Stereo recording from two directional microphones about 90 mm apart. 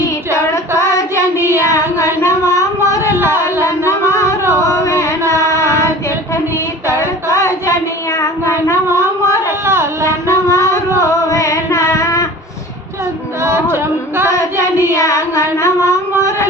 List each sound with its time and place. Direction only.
0.3 s child singing: 35° left (ahead or behind)
2.0 s a sound: 35° left (ahead or behind)
4.1 s music: 35° left (ahead or behind)
5.4 s child singing: 35° left (ahead or behind)
7.0 s child singing: 35° left (ahead or behind)
10.2 s a sound: 35° right (ahead or behind)
10.9 s a sound: 35° left (ahead or behind)
13.4 s music: 30° right (ahead or behind)
14.9 s child singing: 35° left (ahead or behind)